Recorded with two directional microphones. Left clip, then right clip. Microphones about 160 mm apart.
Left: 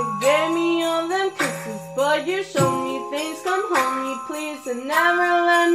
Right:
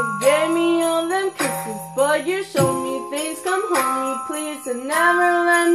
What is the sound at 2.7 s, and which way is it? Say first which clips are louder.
Jingle bell: right 1 dB; 35° right (ahead or behind).